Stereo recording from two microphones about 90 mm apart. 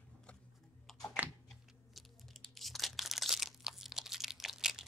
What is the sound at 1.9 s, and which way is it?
Crunch, centre (ahead or behind).